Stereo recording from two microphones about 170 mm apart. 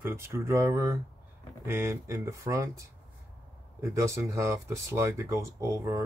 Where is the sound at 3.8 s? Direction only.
15° right (ahead or behind).